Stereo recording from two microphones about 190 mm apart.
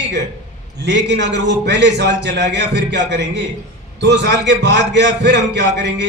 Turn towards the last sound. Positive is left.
turn(degrees=-65)  # may be behind; listen again after turning